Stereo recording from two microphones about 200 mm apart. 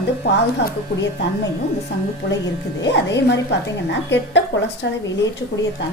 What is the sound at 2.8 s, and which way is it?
A woman's voice, 60° left (ahead or behind).